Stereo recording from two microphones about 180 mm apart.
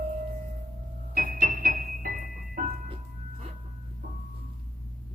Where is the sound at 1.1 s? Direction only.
50° right (ahead or behind).